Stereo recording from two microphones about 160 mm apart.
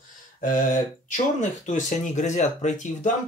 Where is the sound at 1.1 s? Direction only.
50° left (ahead or behind).